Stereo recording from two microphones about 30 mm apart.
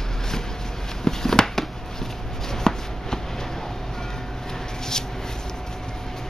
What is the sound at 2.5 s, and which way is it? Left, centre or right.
Shuffling cards, left.